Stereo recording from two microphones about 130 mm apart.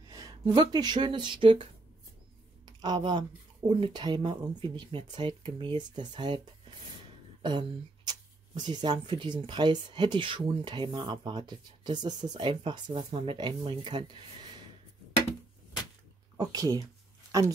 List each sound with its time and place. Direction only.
0.6 s speech: 35° right (ahead or behind)
7.4 s speech: 35° right (ahead or behind)
16.3 s speech: 30° right (ahead or behind)